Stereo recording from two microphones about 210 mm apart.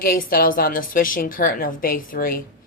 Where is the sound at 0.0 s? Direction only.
45° left (ahead or behind).